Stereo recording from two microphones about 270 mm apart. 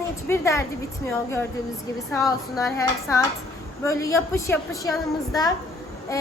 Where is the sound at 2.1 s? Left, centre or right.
Centre.